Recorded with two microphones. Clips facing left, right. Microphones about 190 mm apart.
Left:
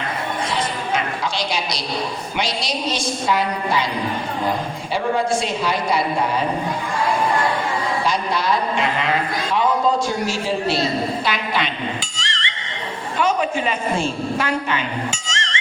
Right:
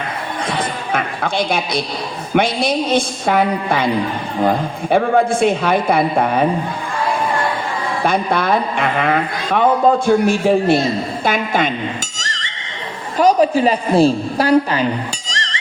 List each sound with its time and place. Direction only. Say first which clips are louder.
0.9 s a woman's voice: right 6 dB; 55° right (ahead or behind)
8.0 s a man's voice: right 8 dB; 55° right (ahead or behind)
12.1 s neigh: even; 40° right (ahead or behind)
13.1 s a woman's voice: right 8 dB; 35° right (ahead or behind)
15.3 s music: right 1 dB; 35° right (ahead or behind)